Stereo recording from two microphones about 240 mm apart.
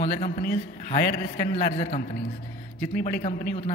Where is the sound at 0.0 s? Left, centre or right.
Left.